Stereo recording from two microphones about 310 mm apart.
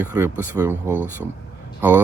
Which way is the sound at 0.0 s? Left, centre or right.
Centre.